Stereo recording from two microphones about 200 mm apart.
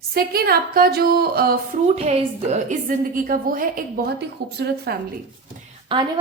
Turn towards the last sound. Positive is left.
turn(degrees=-25)  # may be behind; listen again after turning